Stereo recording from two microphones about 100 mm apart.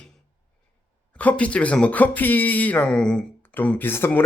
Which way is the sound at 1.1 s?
15° left (ahead or behind).